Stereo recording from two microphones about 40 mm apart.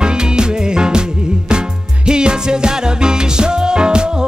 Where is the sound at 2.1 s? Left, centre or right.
Right.